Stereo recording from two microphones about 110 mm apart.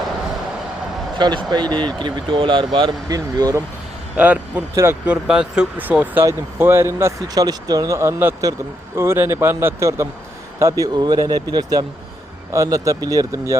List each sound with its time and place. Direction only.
1.2 s speech: 45° right (ahead or behind)
3.1 s speech: 35° right (ahead or behind)
4.2 s speech: 15° right (ahead or behind)
4.7 s speech: 25° right (ahead or behind)
5.0 s speech: 10° right (ahead or behind); by 10.8 s 25° right (ahead or behind)
10.9 s speech: 40° right (ahead or behind)